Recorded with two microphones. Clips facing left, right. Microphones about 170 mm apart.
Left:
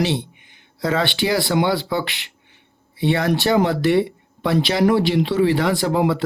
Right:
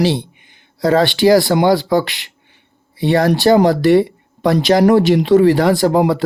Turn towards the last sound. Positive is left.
turn(degrees=-40)  # may be behind; listen again after turning